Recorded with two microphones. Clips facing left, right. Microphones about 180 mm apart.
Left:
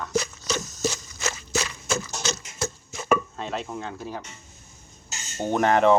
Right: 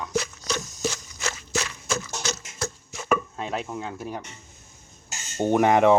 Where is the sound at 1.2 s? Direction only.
5° left (ahead or behind).